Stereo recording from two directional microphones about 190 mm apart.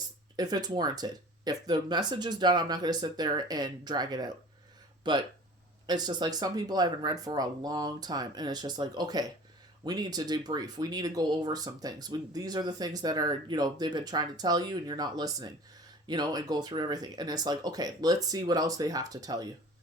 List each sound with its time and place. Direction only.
0.3 s speech: 20° right (ahead or behind)